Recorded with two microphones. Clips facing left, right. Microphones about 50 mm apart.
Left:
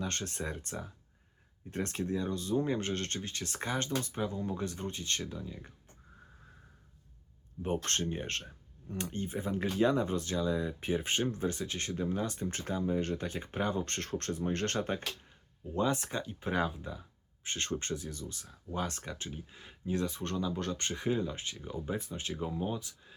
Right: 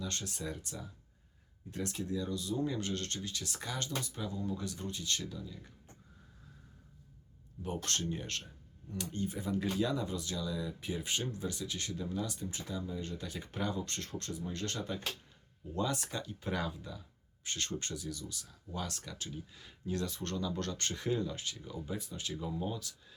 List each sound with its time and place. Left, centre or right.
0.0 s speech: left
7.6 s speech: left
13.2 s speech: left
15.7 s speech: left